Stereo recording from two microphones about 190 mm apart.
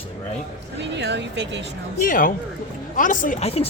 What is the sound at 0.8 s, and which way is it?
Speech, 65° right (ahead or behind).